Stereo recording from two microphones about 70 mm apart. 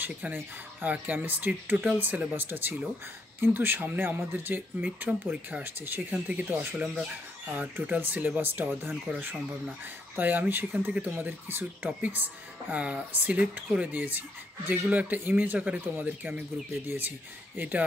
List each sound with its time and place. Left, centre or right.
0.0 s speech: right
6.1 s speech: centre
8.0 s speech: right